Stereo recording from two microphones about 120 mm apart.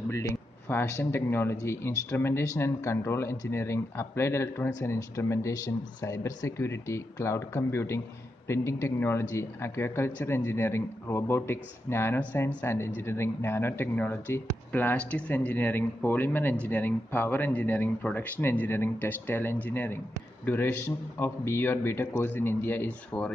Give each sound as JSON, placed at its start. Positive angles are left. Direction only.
{"t": 0.1, "sound": "speech", "side_deg": 20}